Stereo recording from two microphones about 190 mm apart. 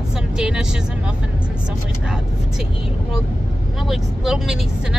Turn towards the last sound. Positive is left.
turn(degrees=0)  # may be behind; listen again after turning